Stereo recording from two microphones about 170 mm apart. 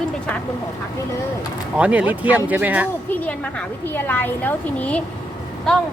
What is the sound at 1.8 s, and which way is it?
Speech, 10° right (ahead or behind).